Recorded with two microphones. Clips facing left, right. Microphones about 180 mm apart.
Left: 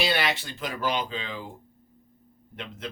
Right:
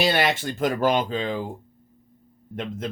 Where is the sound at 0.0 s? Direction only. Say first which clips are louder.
Right 5 dB; 45° right (ahead or behind).